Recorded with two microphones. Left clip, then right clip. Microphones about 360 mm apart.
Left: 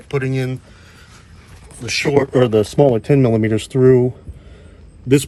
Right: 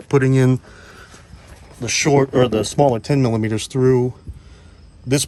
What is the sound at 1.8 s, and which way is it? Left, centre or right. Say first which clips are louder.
Speech: even; centre.